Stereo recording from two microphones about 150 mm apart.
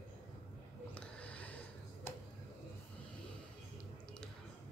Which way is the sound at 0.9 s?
10° left (ahead or behind).